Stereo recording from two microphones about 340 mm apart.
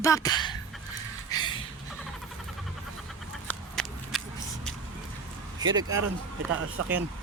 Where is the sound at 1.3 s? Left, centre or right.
Centre.